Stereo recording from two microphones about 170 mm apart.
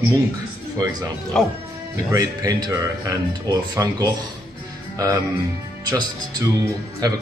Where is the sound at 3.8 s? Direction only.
20° right (ahead or behind).